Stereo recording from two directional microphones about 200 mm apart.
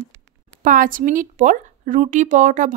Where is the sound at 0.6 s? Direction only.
45° right (ahead or behind).